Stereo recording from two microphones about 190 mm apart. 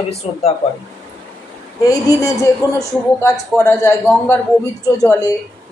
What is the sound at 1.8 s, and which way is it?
A man's voice, 20° left (ahead or behind).